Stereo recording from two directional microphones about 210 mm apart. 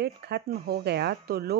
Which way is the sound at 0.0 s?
50° right (ahead or behind).